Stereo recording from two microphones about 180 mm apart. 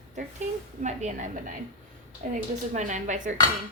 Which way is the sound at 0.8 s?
40° right (ahead or behind).